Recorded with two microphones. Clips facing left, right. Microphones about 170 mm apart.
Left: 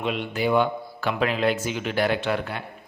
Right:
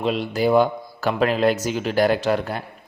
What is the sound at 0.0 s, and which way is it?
A man's voice, 35° right (ahead or behind).